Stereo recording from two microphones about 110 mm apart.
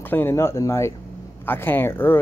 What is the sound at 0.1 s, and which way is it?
Speech, 20° left (ahead or behind).